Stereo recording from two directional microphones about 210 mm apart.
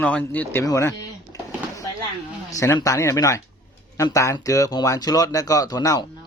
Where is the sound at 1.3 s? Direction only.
15° left (ahead or behind).